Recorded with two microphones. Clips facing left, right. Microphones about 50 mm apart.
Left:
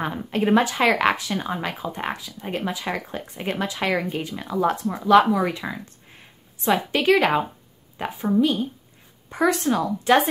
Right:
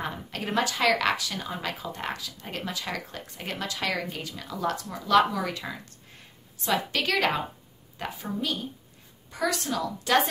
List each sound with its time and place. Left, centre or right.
0.0 s a woman's voice: left